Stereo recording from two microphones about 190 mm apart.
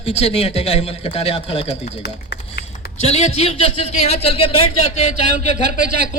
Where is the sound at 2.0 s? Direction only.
60° left (ahead or behind).